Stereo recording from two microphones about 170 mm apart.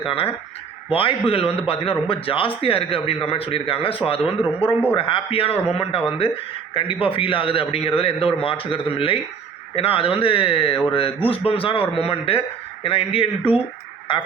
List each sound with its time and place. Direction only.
0.0 s a man's voice: 35° left (ahead or behind)